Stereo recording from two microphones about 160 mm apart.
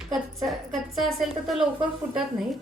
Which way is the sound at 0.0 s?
Centre (ahead or behind).